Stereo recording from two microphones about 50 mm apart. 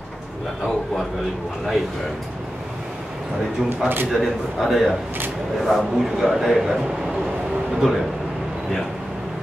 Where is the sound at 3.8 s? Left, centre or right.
Right.